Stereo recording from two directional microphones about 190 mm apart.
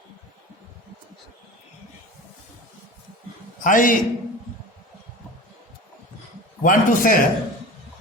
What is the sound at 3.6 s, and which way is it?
Speech, 45° left (ahead or behind).